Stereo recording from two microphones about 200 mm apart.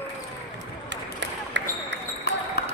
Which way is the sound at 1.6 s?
65° right (ahead or behind).